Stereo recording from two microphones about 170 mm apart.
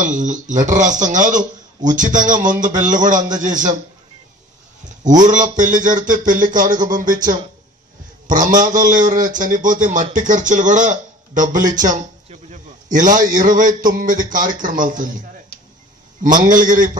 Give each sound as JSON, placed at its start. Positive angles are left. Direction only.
{"t": 0.0, "sound": "speech", "side_deg": -50}
{"t": 4.8, "sound": "speech", "side_deg": -50}
{"t": 16.2, "sound": "speech", "side_deg": -50}